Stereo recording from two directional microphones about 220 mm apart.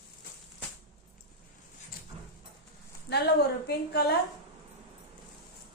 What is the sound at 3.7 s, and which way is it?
Speech, 45° left (ahead or behind).